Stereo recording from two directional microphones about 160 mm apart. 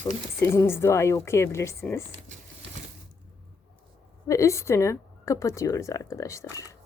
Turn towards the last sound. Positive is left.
turn(degrees=20)  # may be behind; listen again after turning